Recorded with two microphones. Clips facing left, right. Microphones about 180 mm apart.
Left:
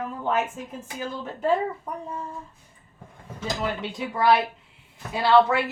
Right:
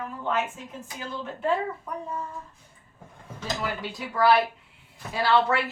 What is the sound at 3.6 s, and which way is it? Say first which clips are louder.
Speech: left 3 dB; 25° left (ahead or behind).